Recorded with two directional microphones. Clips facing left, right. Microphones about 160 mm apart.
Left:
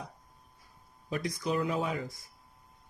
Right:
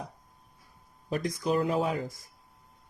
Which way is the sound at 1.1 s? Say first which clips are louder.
Right 4 dB; 45° right (ahead or behind).